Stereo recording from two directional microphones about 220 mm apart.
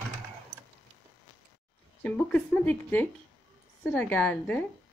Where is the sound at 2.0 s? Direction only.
5° left (ahead or behind).